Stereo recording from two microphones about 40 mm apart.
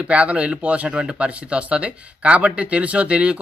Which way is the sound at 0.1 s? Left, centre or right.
Right.